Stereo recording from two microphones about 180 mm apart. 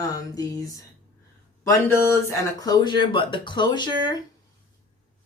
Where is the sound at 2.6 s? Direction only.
20° left (ahead or behind).